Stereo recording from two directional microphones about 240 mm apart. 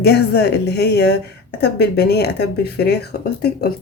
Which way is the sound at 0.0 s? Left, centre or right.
Left.